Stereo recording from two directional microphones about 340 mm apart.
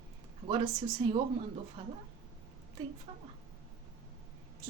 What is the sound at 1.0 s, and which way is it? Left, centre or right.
Speech, centre.